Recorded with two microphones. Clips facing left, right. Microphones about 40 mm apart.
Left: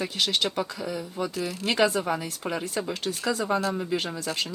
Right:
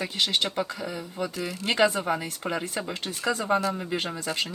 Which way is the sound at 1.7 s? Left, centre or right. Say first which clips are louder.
Right 1 dB; right.